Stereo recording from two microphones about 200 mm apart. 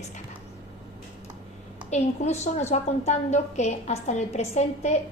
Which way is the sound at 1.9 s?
35° left (ahead or behind).